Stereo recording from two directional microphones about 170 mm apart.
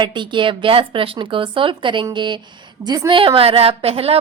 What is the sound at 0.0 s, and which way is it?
A woman's voice, 30° right (ahead or behind).